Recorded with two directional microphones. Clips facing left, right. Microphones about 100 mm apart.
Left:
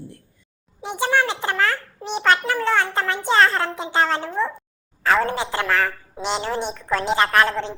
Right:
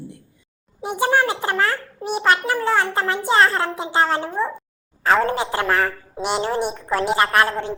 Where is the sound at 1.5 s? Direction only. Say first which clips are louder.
Even; 25° right (ahead or behind).